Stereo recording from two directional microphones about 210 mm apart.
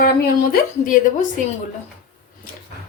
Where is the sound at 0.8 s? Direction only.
40° left (ahead or behind).